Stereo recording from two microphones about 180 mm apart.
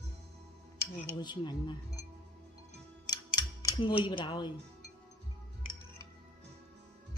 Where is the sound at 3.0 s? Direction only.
20° left (ahead or behind).